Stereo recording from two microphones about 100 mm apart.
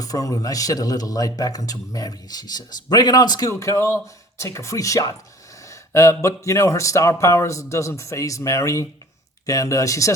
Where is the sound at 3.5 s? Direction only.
30° left (ahead or behind).